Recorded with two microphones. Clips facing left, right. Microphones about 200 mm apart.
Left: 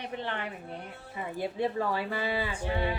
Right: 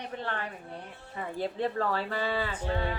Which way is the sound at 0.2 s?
20° left (ahead or behind).